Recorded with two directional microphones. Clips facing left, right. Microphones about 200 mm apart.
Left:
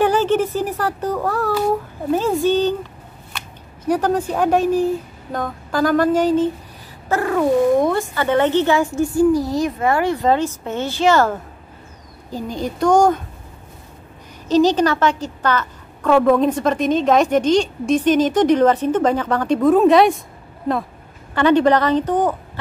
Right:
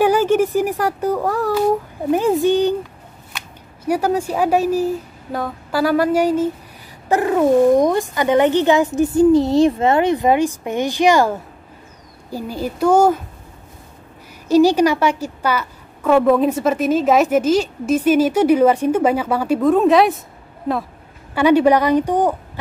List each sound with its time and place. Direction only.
0.0 s a woman's voice: 10° right (ahead or behind)
7.1 s a woman's voice: 20° right (ahead or behind)
14.5 s a woman's voice: 10° right (ahead or behind)
21.4 s a woman's voice: 10° right (ahead or behind)